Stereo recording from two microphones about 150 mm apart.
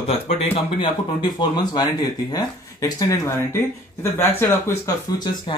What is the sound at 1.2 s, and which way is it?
Speech, 30° left (ahead or behind).